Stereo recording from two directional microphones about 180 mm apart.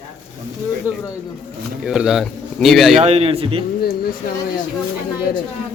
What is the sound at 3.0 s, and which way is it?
Speech, 35° right (ahead or behind).